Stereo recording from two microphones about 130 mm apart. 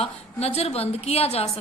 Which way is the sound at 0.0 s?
55° left (ahead or behind).